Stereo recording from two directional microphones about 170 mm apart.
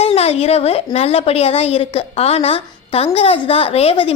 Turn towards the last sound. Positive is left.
turn(degrees=35)  # may be behind; listen again after turning